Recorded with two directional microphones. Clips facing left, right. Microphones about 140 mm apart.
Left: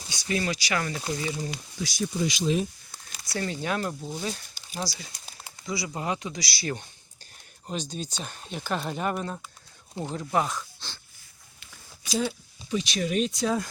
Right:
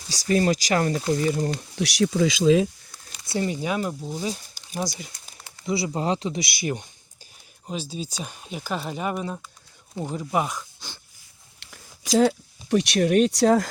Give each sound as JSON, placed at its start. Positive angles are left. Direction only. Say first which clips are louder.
{"t": 0.1, "sound": "speech", "louder": "right 8 dB", "side_deg": -40}
{"t": 1.7, "sound": "speech", "louder": "right 7 dB", "side_deg": -75}
{"t": 3.2, "sound": "speech", "louder": "right 4 dB", "side_deg": -20}
{"t": 5.6, "sound": "speech", "louder": "right 6 dB", "side_deg": -30}
{"t": 7.7, "sound": "speech", "louder": "right 2 dB", "side_deg": -5}
{"t": 11.6, "sound": "speech", "louder": "right 4 dB", "side_deg": -80}